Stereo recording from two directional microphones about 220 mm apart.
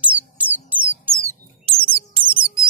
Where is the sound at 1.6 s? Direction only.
25° right (ahead or behind).